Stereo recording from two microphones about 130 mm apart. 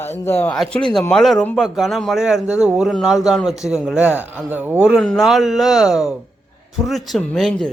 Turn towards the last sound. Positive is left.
turn(degrees=5)  # may be behind; listen again after turning